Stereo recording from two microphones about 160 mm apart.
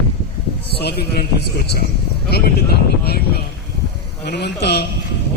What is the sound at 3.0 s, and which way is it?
Speech, 80° left.